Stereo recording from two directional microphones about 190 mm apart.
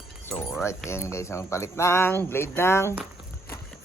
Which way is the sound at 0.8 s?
15° left (ahead or behind).